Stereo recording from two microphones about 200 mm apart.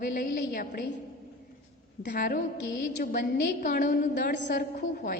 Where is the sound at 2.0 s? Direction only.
50° left (ahead or behind).